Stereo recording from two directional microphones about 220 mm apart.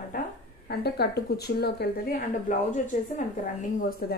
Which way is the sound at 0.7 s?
45° left (ahead or behind).